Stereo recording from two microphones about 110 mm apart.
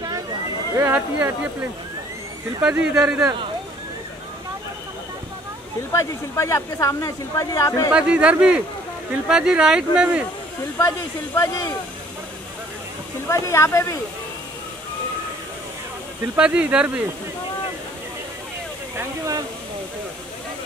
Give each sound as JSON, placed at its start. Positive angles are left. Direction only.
{"t": 0.7, "sound": "speech", "side_deg": -15}
{"t": 5.9, "sound": "speech", "side_deg": 30}
{"t": 7.9, "sound": "speech", "side_deg": -10}
{"t": 10.8, "sound": "speech", "side_deg": 30}
{"t": 13.3, "sound": "speech", "side_deg": 25}
{"t": 16.3, "sound": "speech", "side_deg": -10}
{"t": 18.9, "sound": "speech", "side_deg": -30}